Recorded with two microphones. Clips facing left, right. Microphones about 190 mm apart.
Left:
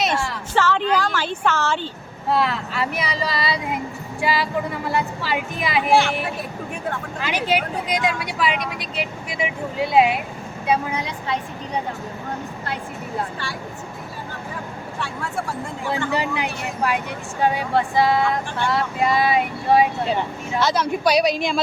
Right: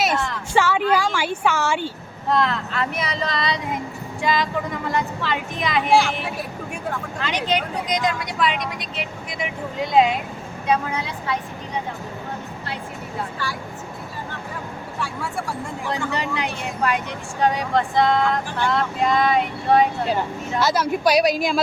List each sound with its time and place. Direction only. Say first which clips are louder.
0.0 s a sound: even; 5° right (ahead or behind)
2.3 s speech: even; 5° left (ahead or behind)
15.9 s speech: left 3 dB; 10° left (ahead or behind)